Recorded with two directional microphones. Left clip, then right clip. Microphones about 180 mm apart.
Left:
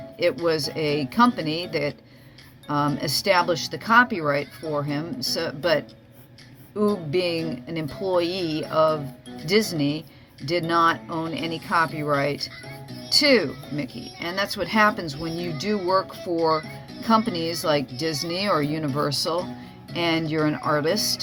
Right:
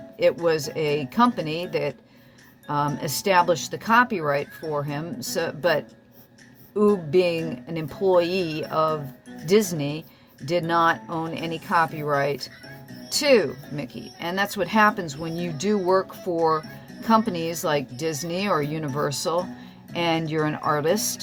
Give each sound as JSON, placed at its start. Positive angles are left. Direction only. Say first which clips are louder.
{"t": 0.2, "sound": "speech", "louder": "right 1 dB", "side_deg": -25}